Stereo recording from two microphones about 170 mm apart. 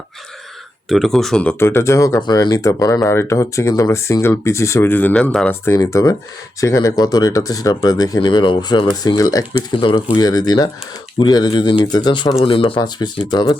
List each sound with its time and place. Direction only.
0.9 s speech: centre (ahead or behind)
5.6 s speech: 15° left (ahead or behind)